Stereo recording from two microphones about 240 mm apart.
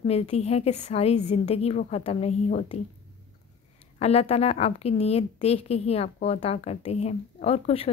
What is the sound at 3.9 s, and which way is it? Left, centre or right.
A woman's voice, left.